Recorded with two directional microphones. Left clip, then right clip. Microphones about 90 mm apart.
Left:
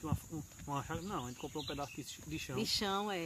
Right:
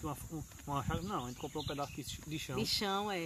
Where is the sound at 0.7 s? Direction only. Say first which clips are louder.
Right 2 dB; 25° right (ahead or behind).